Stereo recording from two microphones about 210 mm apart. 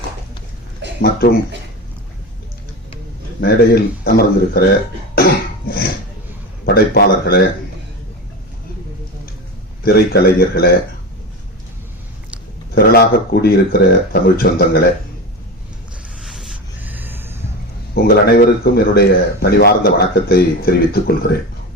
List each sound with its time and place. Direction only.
1.0 s speech: 45° left (ahead or behind)
3.4 s speech: 45° left (ahead or behind)
5.1 s cough: 45° left (ahead or behind)
6.7 s speech: 50° left (ahead or behind)
9.8 s speech: 45° left (ahead or behind)
12.7 s speech: 50° left (ahead or behind)
16.2 s a sound: centre (ahead or behind)
17.9 s speech: 45° left (ahead or behind)